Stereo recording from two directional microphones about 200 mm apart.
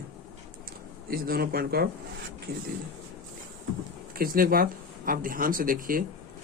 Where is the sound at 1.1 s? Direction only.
50° right (ahead or behind).